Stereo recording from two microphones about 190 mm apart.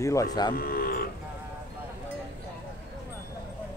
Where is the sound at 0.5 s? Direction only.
50° left (ahead or behind).